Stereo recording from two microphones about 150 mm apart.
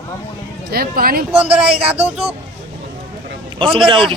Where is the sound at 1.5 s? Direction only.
5° right (ahead or behind).